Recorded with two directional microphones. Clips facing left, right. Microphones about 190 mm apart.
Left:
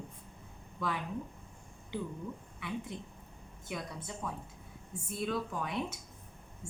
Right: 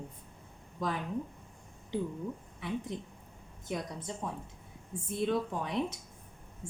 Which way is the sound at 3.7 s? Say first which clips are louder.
Right 4 dB; 30° right (ahead or behind).